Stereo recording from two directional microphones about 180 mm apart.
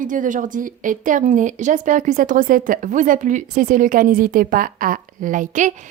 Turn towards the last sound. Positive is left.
turn(degrees=-45)  # may be behind; listen again after turning